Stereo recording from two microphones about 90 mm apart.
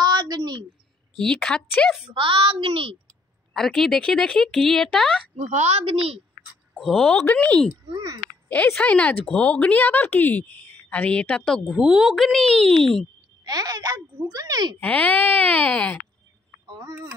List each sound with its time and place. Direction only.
0.0 s a sound: 50° right (ahead or behind)
1.1 s a woman's voice: 5° left (ahead or behind)
2.1 s a woman's voice: 70° right (ahead or behind); by 3.0 s 90° right
3.5 s speech: 5° left (ahead or behind)
5.9 s a woman's voice: 90° right
6.7 s speech: centre (ahead or behind)
7.2 s a woman's voice: 15° left (ahead or behind)
11.7 s speech: 5° right (ahead or behind)
13.5 s a child's voice: 45° right (ahead or behind)
14.8 s a woman's voice: 15° left (ahead or behind)
16.8 s speech: 30° right (ahead or behind)